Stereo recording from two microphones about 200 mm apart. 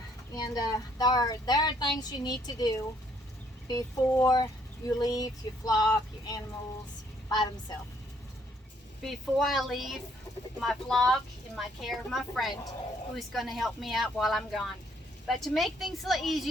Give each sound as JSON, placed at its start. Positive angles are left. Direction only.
{"t": 0.3, "sound": "speech", "side_deg": 20}
{"t": 9.0, "sound": "speech", "side_deg": 0}